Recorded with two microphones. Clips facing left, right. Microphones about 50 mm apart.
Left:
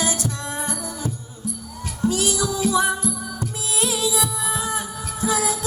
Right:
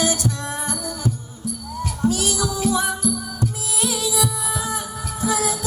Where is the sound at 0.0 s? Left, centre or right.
Left.